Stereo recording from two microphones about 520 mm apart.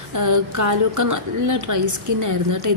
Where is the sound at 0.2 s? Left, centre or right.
Right.